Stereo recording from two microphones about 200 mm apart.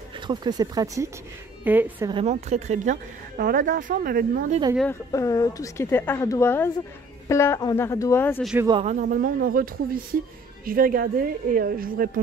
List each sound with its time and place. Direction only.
0.3 s speech: 20° right (ahead or behind)
2.0 s speech: 30° right (ahead or behind); by 4.6 s 45° right (ahead or behind)
5.1 s a woman's voice: 15° left (ahead or behind)
8.6 s speech: 25° right (ahead or behind)
8.9 s a woman's voice: 45° right (ahead or behind)